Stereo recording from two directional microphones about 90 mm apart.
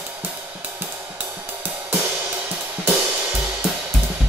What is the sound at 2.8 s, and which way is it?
Music, 25° right (ahead or behind).